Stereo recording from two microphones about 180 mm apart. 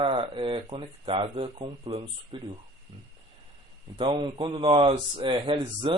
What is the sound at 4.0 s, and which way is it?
Speech, 25° right (ahead or behind).